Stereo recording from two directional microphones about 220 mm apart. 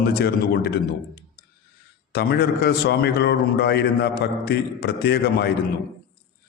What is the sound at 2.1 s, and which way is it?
A man's voice, 45° left (ahead or behind).